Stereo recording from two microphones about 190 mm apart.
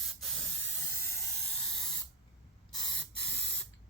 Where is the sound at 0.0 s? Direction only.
Centre (ahead or behind).